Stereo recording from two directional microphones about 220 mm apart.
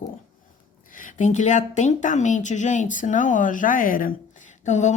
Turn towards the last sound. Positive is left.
turn(degrees=30)  # may be behind; listen again after turning